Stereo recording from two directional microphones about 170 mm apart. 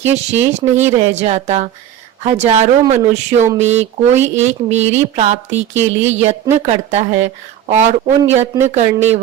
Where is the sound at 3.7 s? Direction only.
40° right (ahead or behind).